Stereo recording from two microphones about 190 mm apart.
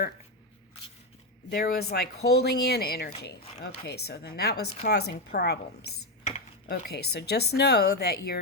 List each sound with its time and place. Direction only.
1.5 s a woman's voice: 55° left (ahead or behind)